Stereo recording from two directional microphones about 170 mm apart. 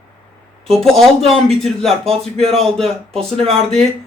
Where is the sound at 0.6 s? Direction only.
Centre (ahead or behind).